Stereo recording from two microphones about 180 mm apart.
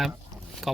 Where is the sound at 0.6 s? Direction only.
Centre (ahead or behind).